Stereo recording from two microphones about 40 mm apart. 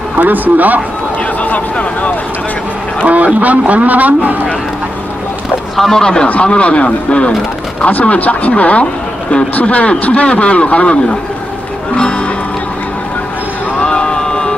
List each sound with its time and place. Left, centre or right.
0.2 s speech: right
1.4 s a sound: left
3.3 s a man's voice: right
5.8 s speech: centre
6.2 s a man's voice: left
11.9 s music: left
13.7 s a sound: left